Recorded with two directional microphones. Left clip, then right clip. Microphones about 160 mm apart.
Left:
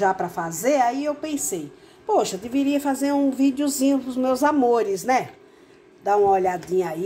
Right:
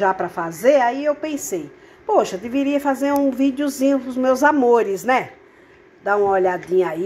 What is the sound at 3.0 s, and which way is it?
A woman's voice, 10° left (ahead or behind).